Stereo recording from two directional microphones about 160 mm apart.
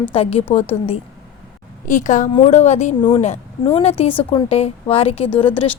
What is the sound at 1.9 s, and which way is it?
A woman's voice, 50° left (ahead or behind).